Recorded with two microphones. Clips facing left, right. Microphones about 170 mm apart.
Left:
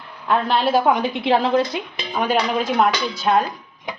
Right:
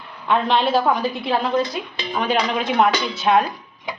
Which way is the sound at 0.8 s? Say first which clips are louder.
Left 2 dB; 20° left (ahead or behind).